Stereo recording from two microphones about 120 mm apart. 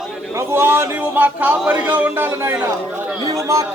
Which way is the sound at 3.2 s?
30° right (ahead or behind).